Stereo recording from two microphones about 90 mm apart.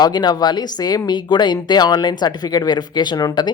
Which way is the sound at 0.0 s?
50° left (ahead or behind).